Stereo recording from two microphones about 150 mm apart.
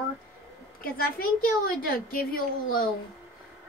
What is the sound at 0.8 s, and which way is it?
A woman's voice, 75° left (ahead or behind).